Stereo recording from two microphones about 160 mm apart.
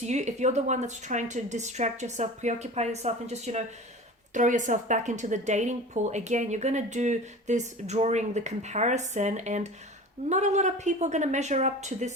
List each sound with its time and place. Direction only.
0.0 s speech: 45° right (ahead or behind)